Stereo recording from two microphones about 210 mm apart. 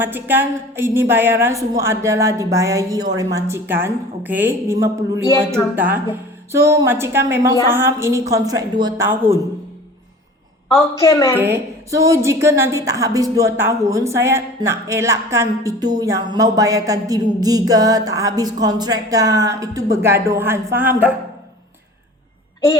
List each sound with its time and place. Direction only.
0.0 s a woman's voice: 10° right (ahead or behind)
11.0 s a woman's voice: 15° left (ahead or behind)
11.3 s a woman's voice: 10° right (ahead or behind)